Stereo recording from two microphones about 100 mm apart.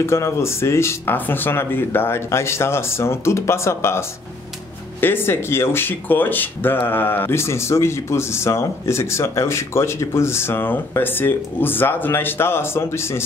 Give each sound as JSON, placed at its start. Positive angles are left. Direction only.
{"t": 0.0, "sound": "speech", "side_deg": 25}
{"t": 5.0, "sound": "speech", "side_deg": 20}